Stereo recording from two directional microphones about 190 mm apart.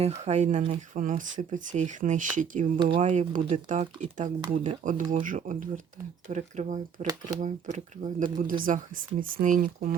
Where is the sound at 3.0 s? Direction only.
40° right (ahead or behind).